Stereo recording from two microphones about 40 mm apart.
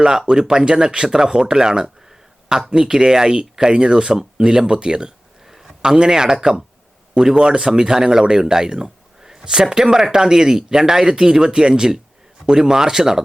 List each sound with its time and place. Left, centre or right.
0.0 s speech: centre